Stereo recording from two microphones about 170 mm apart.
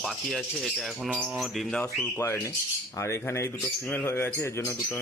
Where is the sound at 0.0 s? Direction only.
Centre (ahead or behind).